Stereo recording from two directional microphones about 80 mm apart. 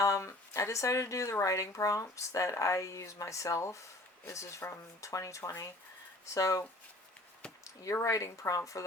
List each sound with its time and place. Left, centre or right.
0.0 s speech: left